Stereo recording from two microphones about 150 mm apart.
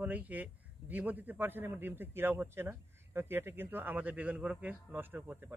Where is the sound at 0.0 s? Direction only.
10° right (ahead or behind).